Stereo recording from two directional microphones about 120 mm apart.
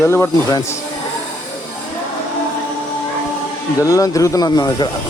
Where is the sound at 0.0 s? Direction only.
25° left (ahead or behind).